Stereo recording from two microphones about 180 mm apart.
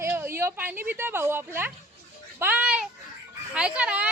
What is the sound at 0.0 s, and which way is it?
Speech, 15° right (ahead or behind).